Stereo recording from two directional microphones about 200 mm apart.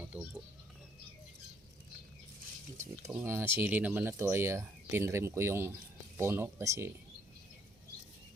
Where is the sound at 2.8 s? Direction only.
15° right (ahead or behind).